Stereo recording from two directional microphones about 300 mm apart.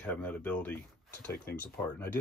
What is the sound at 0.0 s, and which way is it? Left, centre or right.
Speech, centre.